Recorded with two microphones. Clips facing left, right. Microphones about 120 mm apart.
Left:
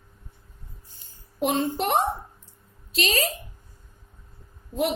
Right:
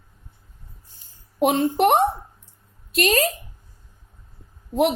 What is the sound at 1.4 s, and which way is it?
A woman's voice, 60° right (ahead or behind).